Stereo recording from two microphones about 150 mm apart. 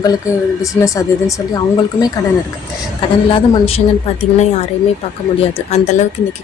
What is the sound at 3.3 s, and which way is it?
Speech, 40° left (ahead or behind).